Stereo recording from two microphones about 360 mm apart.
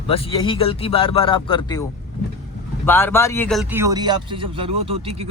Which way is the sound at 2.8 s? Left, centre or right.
Centre.